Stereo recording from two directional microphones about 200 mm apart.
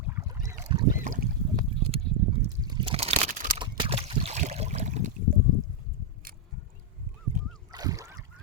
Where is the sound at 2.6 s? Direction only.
20° right (ahead or behind).